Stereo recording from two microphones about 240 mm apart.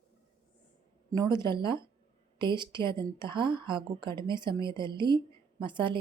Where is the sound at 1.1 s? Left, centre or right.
Centre.